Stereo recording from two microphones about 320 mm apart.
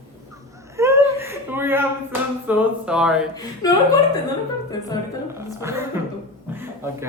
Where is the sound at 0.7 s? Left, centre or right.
Centre.